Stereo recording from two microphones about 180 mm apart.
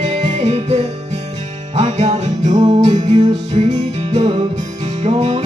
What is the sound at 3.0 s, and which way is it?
Music, 25° right (ahead or behind).